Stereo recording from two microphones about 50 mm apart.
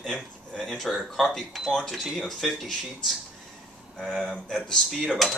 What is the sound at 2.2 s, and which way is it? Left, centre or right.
Speech, centre.